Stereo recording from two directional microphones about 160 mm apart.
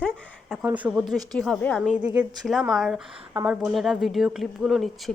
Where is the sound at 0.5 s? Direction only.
10° right (ahead or behind).